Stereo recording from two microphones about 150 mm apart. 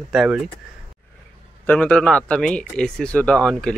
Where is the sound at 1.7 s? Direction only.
10° left (ahead or behind).